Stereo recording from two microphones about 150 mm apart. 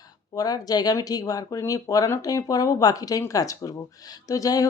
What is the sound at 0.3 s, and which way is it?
Speech, 25° left (ahead or behind).